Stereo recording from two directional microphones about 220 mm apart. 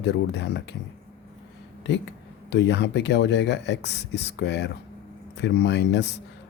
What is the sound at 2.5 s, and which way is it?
Speech, 50° left (ahead or behind).